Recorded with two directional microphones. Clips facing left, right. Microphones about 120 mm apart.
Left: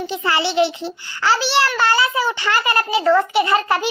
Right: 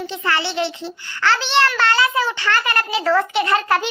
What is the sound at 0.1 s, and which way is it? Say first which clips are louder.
A child's voice: left 3 dB; 15° left (ahead or behind).